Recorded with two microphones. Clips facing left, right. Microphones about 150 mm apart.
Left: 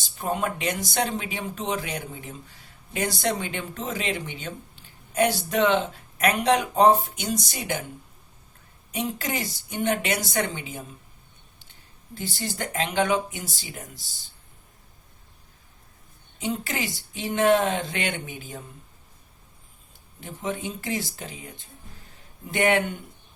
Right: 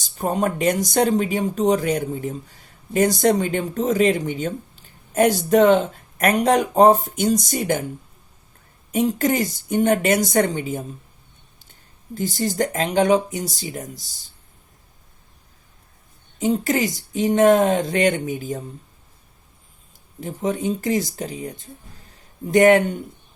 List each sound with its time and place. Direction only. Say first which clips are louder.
0.0 s speech: right 5 dB; 40° right (ahead or behind)
8.9 s speech: right 10 dB; 45° right (ahead or behind)
12.1 s speech: right 10 dB; 45° right (ahead or behind)
16.4 s speech: right 9 dB; 45° right (ahead or behind)
20.2 s speech: right 8 dB; 40° right (ahead or behind)